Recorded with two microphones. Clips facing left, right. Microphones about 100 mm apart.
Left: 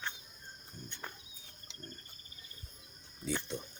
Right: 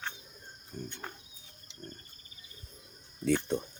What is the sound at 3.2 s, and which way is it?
Speech, 65° right (ahead or behind).